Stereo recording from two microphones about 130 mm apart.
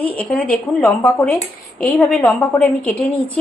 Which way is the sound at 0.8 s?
20° left (ahead or behind).